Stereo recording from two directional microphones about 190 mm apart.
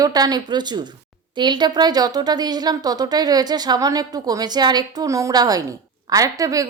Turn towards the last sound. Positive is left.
turn(degrees=-20)  # may be behind; listen again after turning